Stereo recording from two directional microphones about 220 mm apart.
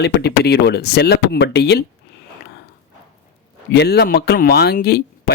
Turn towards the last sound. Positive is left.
turn(degrees=45)  # may be behind; listen again after turning